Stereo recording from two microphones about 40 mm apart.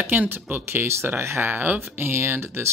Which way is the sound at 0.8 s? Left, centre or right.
Right.